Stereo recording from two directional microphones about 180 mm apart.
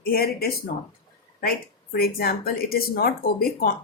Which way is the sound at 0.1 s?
60° left (ahead or behind).